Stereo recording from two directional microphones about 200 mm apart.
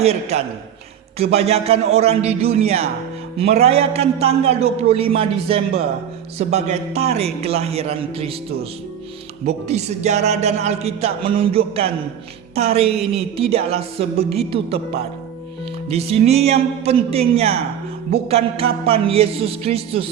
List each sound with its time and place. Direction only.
0.0 s a man's voice: 30° right (ahead or behind)
9.5 s a man's voice: 35° right (ahead or behind)
12.5 s music: 30° right (ahead or behind)
15.9 s a man's voice: 30° right (ahead or behind)
18.1 s music: 30° right (ahead or behind)